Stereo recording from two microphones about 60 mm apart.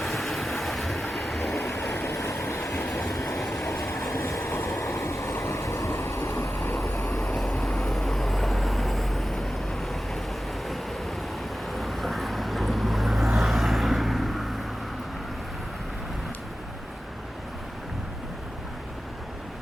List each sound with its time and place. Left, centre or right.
0.0 s vehicle: centre
1.9 s vehicle: left
3.7 s vehicle: left
5.9 s train: left
7.1 s vehicle: centre
11.7 s vehicle: centre